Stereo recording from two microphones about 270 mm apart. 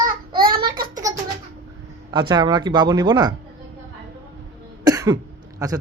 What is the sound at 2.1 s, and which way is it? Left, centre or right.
Speech, centre.